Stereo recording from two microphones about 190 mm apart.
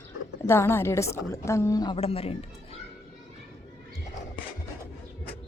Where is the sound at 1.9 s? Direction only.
30° left (ahead or behind).